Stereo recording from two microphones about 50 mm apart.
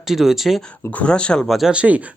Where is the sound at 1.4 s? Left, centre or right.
Centre.